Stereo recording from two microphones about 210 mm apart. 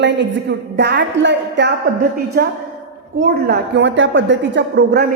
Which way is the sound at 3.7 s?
60° right (ahead or behind).